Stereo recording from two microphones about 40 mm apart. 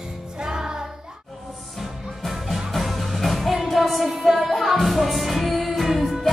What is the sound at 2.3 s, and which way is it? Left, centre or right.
Music, centre.